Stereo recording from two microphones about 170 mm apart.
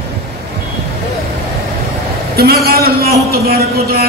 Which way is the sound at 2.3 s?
65° right (ahead or behind).